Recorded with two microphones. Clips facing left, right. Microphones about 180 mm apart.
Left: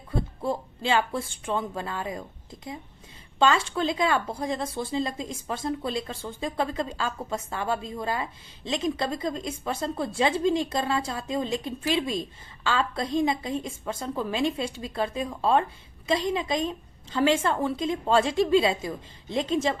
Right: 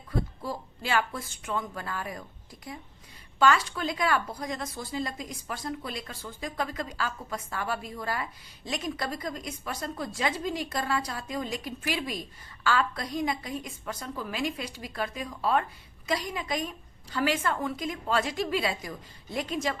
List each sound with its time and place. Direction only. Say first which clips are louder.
0.1 s a woman's voice: left 4 dB; 25° left (ahead or behind)